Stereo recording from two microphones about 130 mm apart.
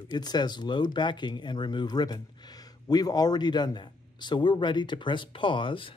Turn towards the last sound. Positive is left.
turn(degrees=40)  # may be behind; listen again after turning